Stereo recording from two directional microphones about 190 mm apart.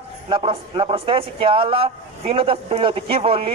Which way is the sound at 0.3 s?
30° right (ahead or behind).